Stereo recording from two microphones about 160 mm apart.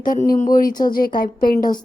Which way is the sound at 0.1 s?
55° left (ahead or behind).